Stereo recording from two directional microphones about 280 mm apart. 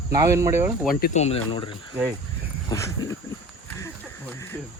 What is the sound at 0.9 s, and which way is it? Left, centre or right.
Speech, left.